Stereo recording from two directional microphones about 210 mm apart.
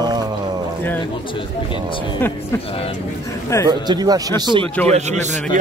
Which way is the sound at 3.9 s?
20° right (ahead or behind).